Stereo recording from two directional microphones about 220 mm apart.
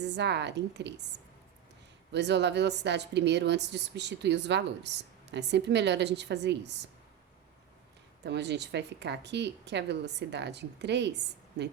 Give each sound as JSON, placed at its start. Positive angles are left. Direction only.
{"t": 0.0, "sound": "a woman's voice", "side_deg": -50}
{"t": 2.1, "sound": "a woman's voice", "side_deg": -50}
{"t": 8.2, "sound": "a woman's voice", "side_deg": -50}